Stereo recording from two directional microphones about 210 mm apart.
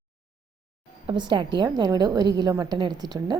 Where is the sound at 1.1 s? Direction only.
20° right (ahead or behind).